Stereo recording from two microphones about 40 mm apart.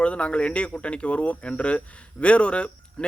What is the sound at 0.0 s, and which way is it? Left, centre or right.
Speech, left.